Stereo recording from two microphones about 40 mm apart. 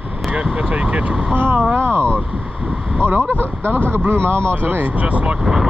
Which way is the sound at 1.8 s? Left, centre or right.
Right.